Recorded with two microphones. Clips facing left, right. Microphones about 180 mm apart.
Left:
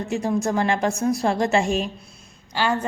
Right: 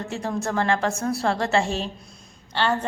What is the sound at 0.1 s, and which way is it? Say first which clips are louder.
A woman's voice: left 5 dB; 15° left (ahead or behind).